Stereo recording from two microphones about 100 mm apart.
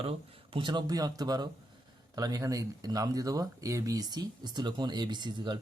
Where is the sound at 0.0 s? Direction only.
70° right (ahead or behind).